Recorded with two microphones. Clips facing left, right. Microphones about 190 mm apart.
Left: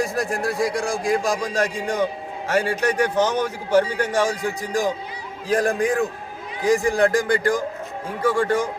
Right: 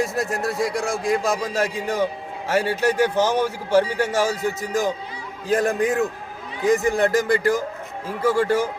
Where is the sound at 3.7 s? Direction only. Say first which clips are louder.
Left 1 dB; 25° right (ahead or behind).